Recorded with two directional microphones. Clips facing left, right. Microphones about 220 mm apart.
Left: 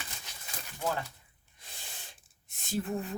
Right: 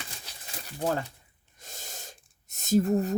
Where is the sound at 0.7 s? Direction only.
45° right (ahead or behind).